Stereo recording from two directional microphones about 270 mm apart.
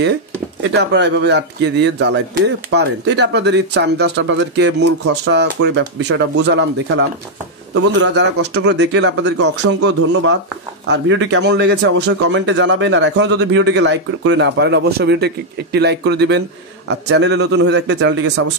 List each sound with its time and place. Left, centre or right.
0.7 s a man's voice: right